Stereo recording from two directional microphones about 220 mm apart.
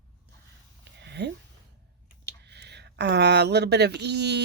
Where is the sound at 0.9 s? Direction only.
50° right (ahead or behind).